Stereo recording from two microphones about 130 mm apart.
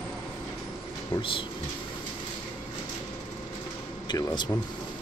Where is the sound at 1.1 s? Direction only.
40° left (ahead or behind).